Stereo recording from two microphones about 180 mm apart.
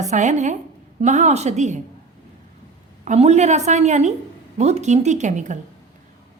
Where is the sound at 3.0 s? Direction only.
40° right (ahead or behind).